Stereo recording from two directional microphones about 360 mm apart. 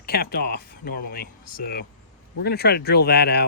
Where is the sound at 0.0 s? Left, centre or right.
Left.